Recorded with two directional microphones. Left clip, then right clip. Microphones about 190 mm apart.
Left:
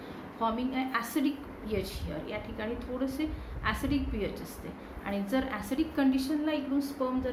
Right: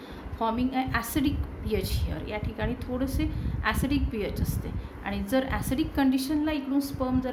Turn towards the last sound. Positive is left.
turn(degrees=-60)  # may be behind; listen again after turning